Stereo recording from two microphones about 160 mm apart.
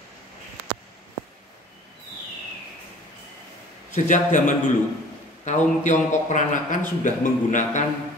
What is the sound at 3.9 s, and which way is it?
A man's voice, 50° left (ahead or behind).